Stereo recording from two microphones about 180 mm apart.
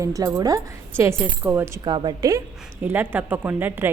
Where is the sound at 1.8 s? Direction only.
25° right (ahead or behind).